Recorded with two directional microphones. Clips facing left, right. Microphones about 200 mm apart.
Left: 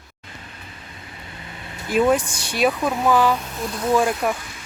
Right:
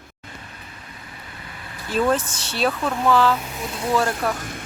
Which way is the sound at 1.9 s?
15° left (ahead or behind).